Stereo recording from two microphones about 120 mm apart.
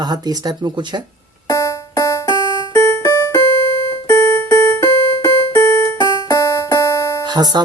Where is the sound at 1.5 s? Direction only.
25° left (ahead or behind).